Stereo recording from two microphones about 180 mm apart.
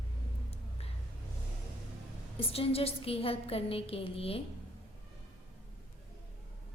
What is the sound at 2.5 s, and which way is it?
A woman's voice, 30° left (ahead or behind).